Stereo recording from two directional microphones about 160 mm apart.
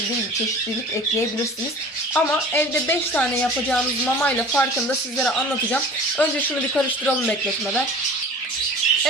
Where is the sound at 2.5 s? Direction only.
10° left (ahead or behind).